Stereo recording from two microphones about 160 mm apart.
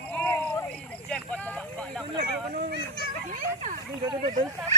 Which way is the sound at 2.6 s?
70° right (ahead or behind).